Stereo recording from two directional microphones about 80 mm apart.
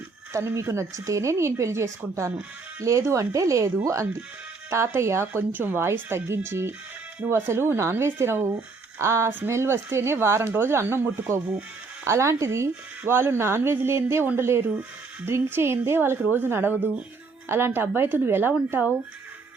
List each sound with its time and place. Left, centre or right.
0.3 s speech: right